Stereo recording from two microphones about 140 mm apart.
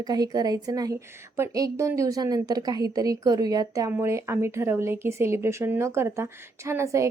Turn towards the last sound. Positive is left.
turn(degrees=-20)  # may be behind; listen again after turning